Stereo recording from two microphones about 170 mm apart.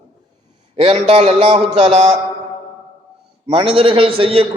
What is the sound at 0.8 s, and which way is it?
A man's voice, 35° right (ahead or behind).